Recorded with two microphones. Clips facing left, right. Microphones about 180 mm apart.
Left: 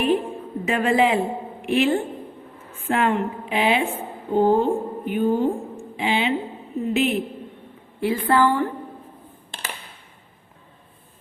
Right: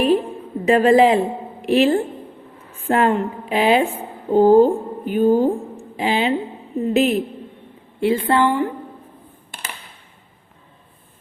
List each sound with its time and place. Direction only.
0.0 s a sound: 35° right (ahead or behind)
1.6 s a woman's voice: 35° right (ahead or behind)
8.0 s a woman's voice: 25° right (ahead or behind)